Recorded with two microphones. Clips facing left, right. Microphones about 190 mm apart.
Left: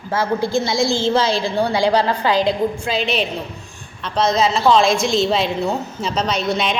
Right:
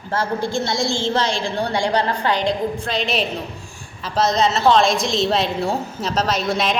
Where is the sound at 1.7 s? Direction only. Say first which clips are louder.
Left 2 dB; 90° left.